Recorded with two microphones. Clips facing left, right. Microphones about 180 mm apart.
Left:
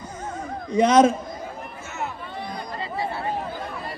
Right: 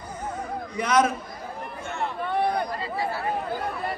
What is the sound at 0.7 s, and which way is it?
Speech, 25° left (ahead or behind).